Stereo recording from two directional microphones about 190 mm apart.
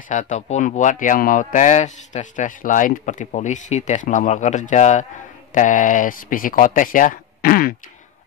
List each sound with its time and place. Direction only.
0.1 s a man's voice: 40° left (ahead or behind)